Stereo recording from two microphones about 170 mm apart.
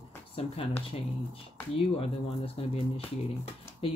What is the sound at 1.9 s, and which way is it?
Speech, 35° left (ahead or behind).